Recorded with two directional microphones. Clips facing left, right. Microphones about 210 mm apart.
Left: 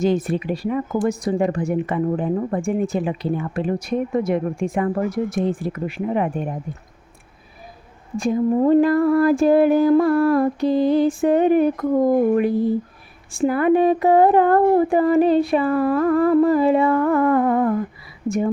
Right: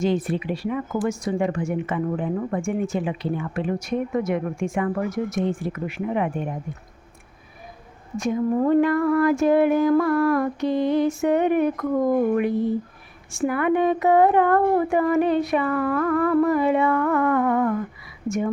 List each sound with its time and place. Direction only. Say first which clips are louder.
0.0 s a woman's voice: left 3 dB; 45° left (ahead or behind)
8.1 s a woman's voice: left 3 dB; 30° left (ahead or behind)